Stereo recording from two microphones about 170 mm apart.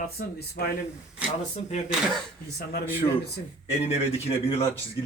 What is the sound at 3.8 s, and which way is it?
Speech, 35° left (ahead or behind).